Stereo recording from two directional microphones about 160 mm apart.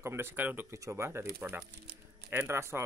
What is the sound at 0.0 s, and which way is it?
Speech, 15° right (ahead or behind).